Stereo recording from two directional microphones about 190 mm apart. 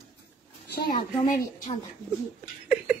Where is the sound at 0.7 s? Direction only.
55° left (ahead or behind).